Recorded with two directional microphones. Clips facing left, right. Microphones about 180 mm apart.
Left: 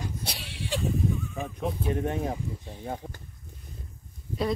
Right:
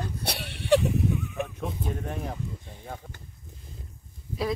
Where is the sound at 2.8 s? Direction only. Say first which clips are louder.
Left 5 dB; 40° left (ahead or behind).